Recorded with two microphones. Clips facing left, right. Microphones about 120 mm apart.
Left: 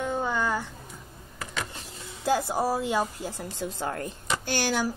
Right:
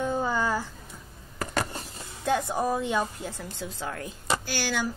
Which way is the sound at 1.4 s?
45° right (ahead or behind).